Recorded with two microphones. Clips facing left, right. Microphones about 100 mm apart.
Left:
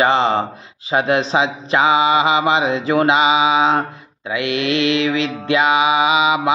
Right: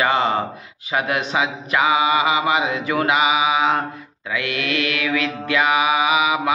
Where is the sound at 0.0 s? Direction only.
25° left (ahead or behind).